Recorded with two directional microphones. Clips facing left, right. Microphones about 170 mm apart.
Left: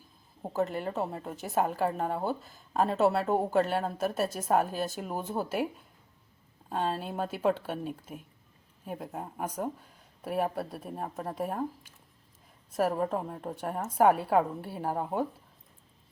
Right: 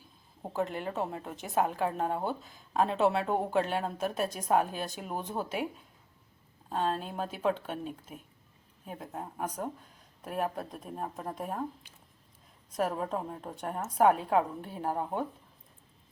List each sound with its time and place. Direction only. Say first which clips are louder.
0.4 s speech: left 2 dB; centre (ahead or behind)
6.7 s speech: even; 5° left (ahead or behind)
12.7 s speech: left 3 dB; 5° left (ahead or behind)